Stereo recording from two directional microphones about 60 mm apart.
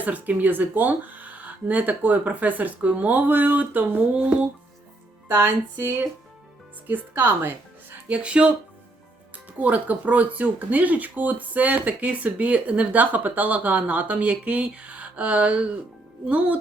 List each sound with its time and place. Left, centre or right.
0.0 s speech: right
4.1 s speech: centre
5.3 s speech: right
7.1 s speech: right
8.0 s speech: centre
9.6 s speech: right